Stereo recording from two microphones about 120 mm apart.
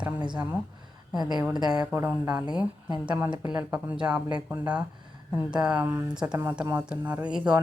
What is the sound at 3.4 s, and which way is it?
Speech, 10° right (ahead or behind).